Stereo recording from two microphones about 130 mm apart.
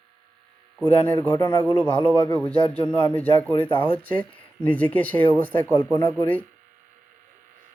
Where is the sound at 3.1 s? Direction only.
10° left (ahead or behind).